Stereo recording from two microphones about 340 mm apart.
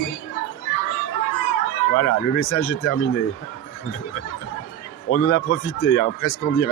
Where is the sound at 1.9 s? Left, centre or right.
Left.